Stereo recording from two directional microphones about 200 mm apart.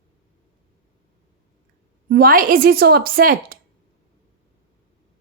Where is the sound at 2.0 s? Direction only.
50° right (ahead or behind).